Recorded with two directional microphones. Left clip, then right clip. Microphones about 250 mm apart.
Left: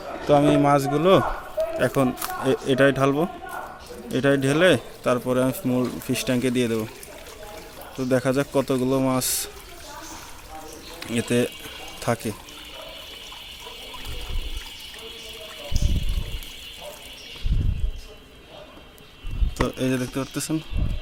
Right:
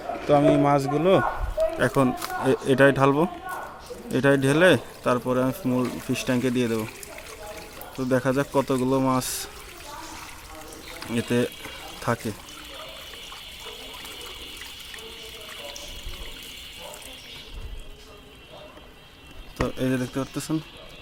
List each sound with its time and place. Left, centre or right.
0.3 s a man's voice: centre
1.8 s a man's voice: centre
7.9 s a man's voice: centre
11.0 s a man's voice: centre
19.6 s a man's voice: centre